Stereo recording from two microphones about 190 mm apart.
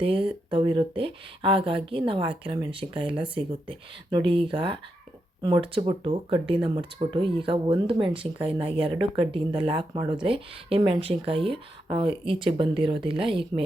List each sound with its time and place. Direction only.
0.0 s speech: 30° right (ahead or behind)